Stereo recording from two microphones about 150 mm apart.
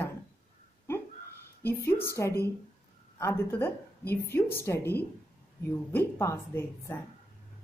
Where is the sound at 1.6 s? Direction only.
15° left (ahead or behind).